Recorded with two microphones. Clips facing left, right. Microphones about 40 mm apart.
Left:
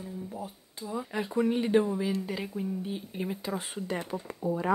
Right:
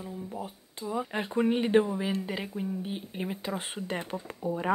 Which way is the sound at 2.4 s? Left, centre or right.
Right.